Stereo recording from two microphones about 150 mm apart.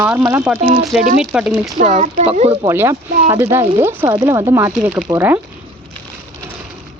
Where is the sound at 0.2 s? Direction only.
20° right (ahead or behind).